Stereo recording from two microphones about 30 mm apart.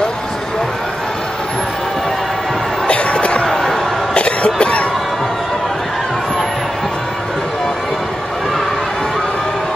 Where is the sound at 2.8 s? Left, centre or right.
Left.